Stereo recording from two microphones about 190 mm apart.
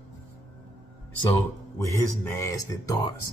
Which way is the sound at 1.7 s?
15° left (ahead or behind).